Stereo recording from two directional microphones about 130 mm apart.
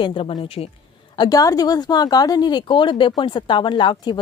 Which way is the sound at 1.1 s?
30° left (ahead or behind).